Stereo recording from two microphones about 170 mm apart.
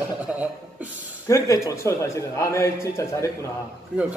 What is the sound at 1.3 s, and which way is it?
A man's voice, 20° left (ahead or behind).